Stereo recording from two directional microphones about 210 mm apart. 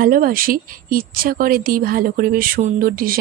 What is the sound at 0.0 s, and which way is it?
Speech, 45° right (ahead or behind).